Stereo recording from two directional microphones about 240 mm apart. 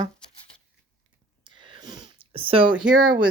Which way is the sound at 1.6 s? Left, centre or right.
Centre.